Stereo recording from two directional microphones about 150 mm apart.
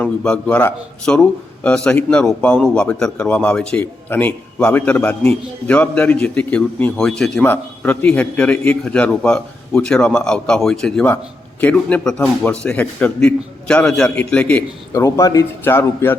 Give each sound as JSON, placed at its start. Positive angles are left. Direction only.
{"t": 0.0, "sound": "speech", "side_deg": 5}
{"t": 14.9, "sound": "speech", "side_deg": 20}